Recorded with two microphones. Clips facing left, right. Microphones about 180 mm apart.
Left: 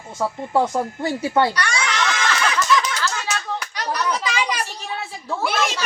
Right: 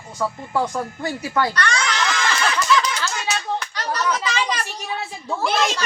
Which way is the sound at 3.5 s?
10° left (ahead or behind).